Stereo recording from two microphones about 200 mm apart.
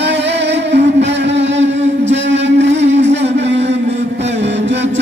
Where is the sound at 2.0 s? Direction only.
60° right (ahead or behind).